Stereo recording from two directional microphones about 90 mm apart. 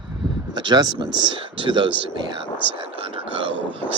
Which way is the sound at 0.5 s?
55° right (ahead or behind).